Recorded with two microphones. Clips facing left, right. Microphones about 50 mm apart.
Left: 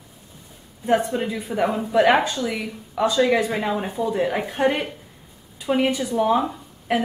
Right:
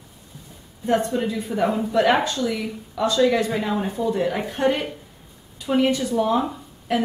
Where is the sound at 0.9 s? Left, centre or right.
Centre.